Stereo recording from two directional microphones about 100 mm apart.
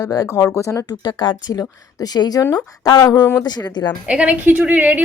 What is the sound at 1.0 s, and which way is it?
Speech, 45° left (ahead or behind).